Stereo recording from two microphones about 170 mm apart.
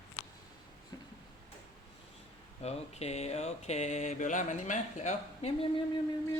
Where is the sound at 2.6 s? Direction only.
40° left (ahead or behind).